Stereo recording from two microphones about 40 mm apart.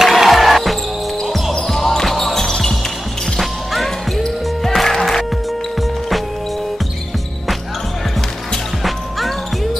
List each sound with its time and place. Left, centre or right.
0.0 s music: centre
1.3 s basketball bounce: centre
3.3 s music: centre
5.8 s music: centre